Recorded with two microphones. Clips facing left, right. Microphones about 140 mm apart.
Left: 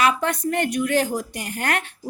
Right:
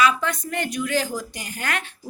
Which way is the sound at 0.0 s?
60° left (ahead or behind).